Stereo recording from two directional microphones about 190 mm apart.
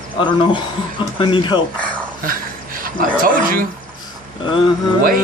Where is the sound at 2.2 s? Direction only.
50° right (ahead or behind).